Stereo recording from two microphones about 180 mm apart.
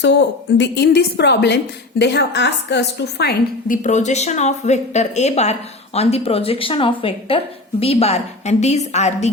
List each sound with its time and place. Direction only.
0.0 s a woman's voice: 80° left
3.8 s a woman's voice: 40° left (ahead or behind)